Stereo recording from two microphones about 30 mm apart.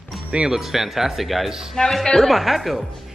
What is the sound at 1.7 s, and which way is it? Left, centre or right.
Speech, centre.